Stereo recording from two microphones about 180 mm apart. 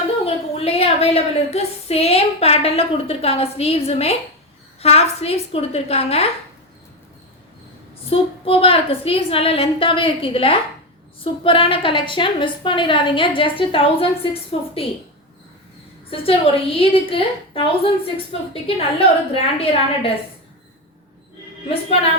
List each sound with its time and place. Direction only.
0.3 s a woman's voice: 35° left (ahead or behind)
8.1 s a woman's voice: 30° left (ahead or behind)
16.0 s a woman's voice: 30° left (ahead or behind)